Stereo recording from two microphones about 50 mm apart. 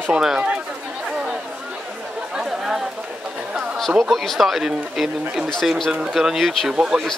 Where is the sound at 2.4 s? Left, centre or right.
Centre.